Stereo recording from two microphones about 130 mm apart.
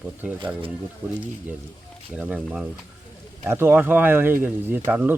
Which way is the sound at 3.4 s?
20° right (ahead or behind).